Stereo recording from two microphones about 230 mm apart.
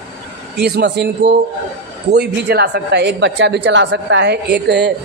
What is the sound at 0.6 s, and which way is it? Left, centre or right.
Speech, right.